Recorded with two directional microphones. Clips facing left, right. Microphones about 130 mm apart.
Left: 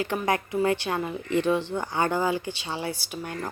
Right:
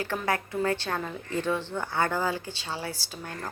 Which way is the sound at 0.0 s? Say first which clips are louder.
Left 3 dB; 20° left (ahead or behind).